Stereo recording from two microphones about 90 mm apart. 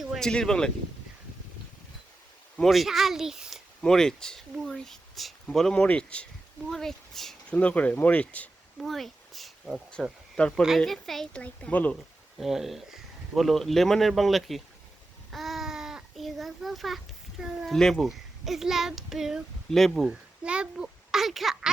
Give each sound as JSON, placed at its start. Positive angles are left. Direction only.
{"t": 0.0, "sound": "a sound", "side_deg": -5}
{"t": 0.3, "sound": "speech", "side_deg": 10}
{"t": 2.6, "sound": "speech", "side_deg": 0}
{"t": 3.8, "sound": "speech", "side_deg": 5}
{"t": 7.5, "sound": "speech", "side_deg": 15}
{"t": 8.8, "sound": "speech", "side_deg": 0}
{"t": 10.4, "sound": "speech", "side_deg": 15}
{"t": 11.4, "sound": "speech", "side_deg": 15}
{"t": 12.4, "sound": "speech", "side_deg": 0}
{"t": 15.3, "sound": "babbling", "side_deg": 0}
{"t": 17.7, "sound": "speech", "side_deg": 5}
{"t": 20.1, "sound": "a child's voice", "side_deg": -10}